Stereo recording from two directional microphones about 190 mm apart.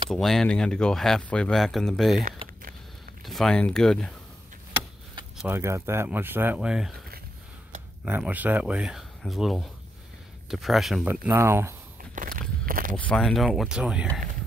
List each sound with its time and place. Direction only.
0.1 s speech: centre (ahead or behind)
2.2 s a sound: 45° right (ahead or behind)
3.3 s speech: 5° left (ahead or behind)
5.5 s speech: 15° right (ahead or behind)
8.0 s speech: 5° right (ahead or behind)
11.2 s speech: 10° right (ahead or behind)
12.2 s walk: 45° right (ahead or behind)
12.9 s speech: 5° left (ahead or behind)